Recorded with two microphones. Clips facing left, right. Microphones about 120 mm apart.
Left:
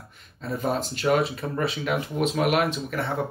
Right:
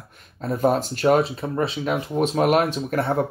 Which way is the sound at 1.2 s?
30° right (ahead or behind).